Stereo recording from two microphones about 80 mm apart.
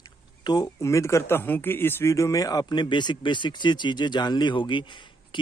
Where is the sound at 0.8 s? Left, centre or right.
Left.